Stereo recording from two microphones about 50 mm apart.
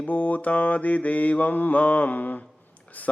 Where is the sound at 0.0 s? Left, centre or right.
Left.